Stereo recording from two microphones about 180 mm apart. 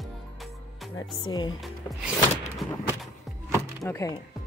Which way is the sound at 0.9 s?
25° left (ahead or behind).